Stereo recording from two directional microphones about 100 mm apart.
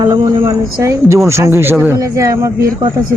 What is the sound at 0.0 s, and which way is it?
Speech, 35° right (ahead or behind).